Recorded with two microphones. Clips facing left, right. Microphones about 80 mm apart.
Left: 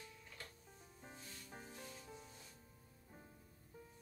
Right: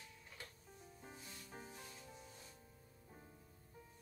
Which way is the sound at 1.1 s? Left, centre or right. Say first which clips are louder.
Left 1 dB; centre.